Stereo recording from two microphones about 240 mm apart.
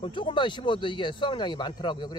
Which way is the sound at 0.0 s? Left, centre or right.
Left.